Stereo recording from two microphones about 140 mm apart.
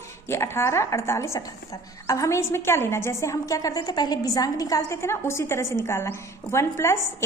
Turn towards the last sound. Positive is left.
turn(degrees=20)  # may be behind; listen again after turning